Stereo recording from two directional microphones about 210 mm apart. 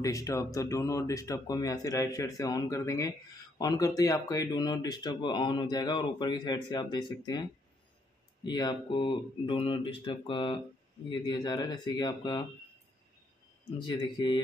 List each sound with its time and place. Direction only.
0.0 s speech: 15° left (ahead or behind)
8.5 s speech: 20° left (ahead or behind)
13.8 s speech: 20° left (ahead or behind)